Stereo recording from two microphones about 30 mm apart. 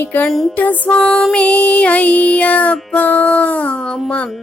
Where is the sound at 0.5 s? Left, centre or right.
Left.